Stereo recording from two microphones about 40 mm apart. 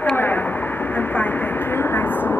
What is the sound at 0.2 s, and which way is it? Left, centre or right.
Vehicle, left.